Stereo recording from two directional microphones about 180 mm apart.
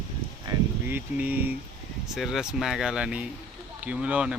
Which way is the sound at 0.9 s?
10° right (ahead or behind).